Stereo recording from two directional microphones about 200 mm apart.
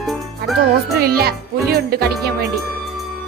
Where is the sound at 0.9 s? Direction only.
50° right (ahead or behind).